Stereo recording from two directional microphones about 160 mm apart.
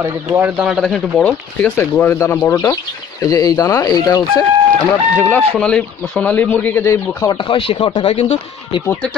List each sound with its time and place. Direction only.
0.0 s speech: 15° right (ahead or behind); by 4.5 s 25° left (ahead or behind)
5.1 s speech: 10° left (ahead or behind)
7.3 s speech: 30° left (ahead or behind)
8.1 s speech: 40° left (ahead or behind)